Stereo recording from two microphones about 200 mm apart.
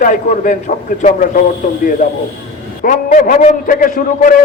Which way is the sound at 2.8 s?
40° left (ahead or behind).